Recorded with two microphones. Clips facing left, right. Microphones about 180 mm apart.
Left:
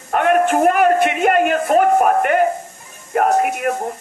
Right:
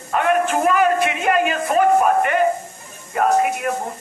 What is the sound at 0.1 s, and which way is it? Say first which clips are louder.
A man's voice: left 3 dB; 55° left (ahead or behind).